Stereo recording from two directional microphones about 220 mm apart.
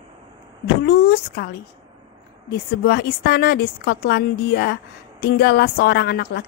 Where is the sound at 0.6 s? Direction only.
45° left (ahead or behind).